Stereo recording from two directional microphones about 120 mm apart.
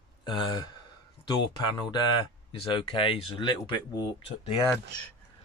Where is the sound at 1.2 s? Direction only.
40° left (ahead or behind).